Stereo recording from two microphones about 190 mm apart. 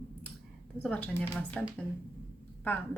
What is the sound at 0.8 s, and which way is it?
Speech, 5° left (ahead or behind).